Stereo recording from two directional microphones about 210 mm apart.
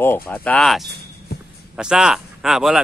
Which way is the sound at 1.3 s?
50° left (ahead or behind).